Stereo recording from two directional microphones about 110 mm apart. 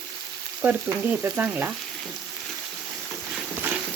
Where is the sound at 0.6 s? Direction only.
15° right (ahead or behind).